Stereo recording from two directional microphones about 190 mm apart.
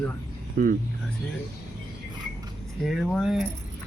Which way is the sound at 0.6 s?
45° right (ahead or behind).